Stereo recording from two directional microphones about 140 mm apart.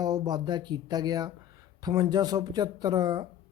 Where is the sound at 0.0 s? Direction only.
30° right (ahead or behind).